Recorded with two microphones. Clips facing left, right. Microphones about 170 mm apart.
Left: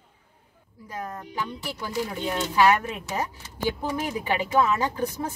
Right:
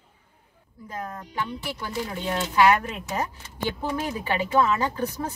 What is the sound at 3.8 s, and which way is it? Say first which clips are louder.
Speech: even; 15° left (ahead or behind).